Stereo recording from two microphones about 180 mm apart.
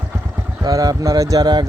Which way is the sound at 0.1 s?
10° right (ahead or behind).